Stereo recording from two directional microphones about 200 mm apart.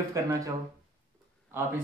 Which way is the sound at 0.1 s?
15° right (ahead or behind).